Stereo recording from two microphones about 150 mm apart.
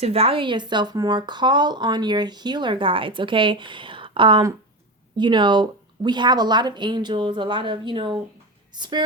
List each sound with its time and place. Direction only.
0.0 s speech: 40° right (ahead or behind)